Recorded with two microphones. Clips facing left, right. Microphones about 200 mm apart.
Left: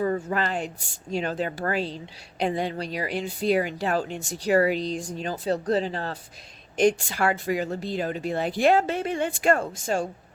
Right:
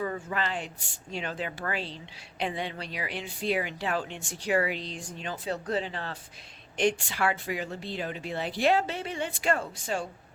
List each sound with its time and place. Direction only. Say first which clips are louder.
0.0 s speech: left 6 dB; 40° left (ahead or behind)